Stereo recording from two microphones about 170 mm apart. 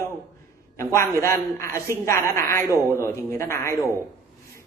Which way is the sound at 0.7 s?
15° left (ahead or behind).